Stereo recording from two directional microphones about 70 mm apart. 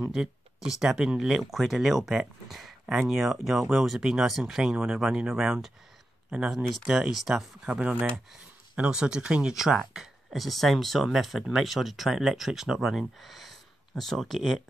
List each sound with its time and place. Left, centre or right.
0.7 s speech: centre
6.5 s speech: centre
7.7 s speech: right; by 14.6 s centre